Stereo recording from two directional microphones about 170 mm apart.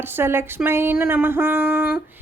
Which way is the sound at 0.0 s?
15° right (ahead or behind).